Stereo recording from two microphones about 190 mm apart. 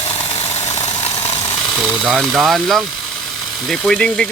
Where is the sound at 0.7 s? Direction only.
35° left (ahead or behind).